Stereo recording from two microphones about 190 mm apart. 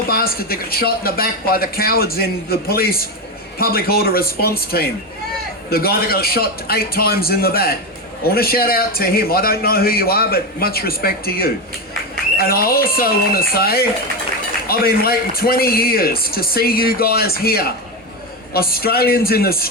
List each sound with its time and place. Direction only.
0.1 s a man's voice: 50° left (ahead or behind)